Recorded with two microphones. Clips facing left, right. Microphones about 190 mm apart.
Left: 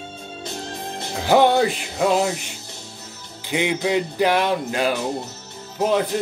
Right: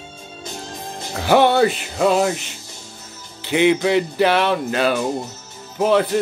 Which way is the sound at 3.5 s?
15° left (ahead or behind).